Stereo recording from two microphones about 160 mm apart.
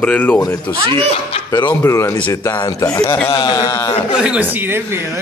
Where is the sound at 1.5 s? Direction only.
25° left (ahead or behind).